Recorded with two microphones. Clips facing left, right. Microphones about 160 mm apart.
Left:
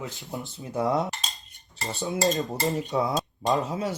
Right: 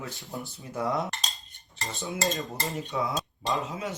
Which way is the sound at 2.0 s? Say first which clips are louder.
Left 5 dB; 35° left (ahead or behind).